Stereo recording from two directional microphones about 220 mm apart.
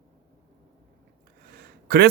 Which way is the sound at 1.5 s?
45° right (ahead or behind).